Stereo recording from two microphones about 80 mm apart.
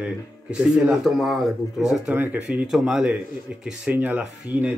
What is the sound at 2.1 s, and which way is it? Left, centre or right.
Speech, right.